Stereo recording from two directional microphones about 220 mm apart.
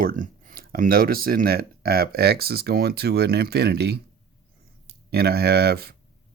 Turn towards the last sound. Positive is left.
turn(degrees=-45)  # may be behind; listen again after turning